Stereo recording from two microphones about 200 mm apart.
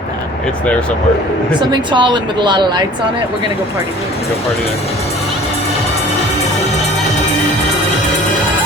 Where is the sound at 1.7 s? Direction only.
25° right (ahead or behind).